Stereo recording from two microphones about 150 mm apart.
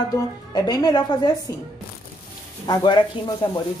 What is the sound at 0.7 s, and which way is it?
Speech, 25° left (ahead or behind).